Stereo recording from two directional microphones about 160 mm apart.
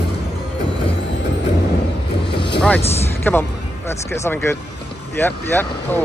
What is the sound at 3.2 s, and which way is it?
Speech, 15° left (ahead or behind).